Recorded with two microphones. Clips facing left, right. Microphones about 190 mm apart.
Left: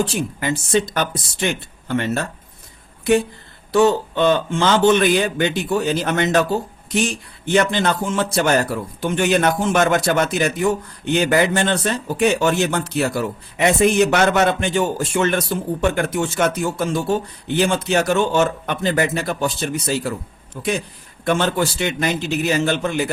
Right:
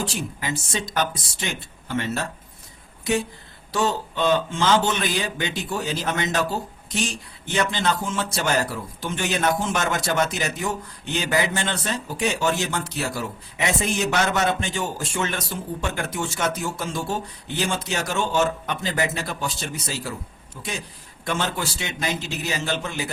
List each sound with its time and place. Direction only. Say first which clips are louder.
0.3 s a man's voice: left 9 dB; 60° left (ahead or behind)
7.5 s a man's voice: left 6 dB; 60° left (ahead or behind)
20.6 s a man's voice: left 10 dB; 60° left (ahead or behind)